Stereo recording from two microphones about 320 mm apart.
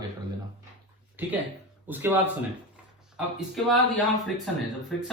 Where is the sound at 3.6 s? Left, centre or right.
Centre.